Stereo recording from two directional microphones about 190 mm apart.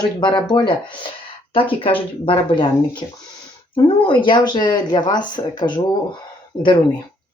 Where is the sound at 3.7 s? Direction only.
25° left (ahead or behind).